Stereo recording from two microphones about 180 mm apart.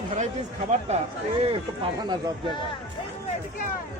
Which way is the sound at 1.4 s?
30° right (ahead or behind).